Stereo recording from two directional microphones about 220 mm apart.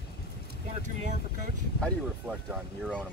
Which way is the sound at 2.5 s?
5° right (ahead or behind).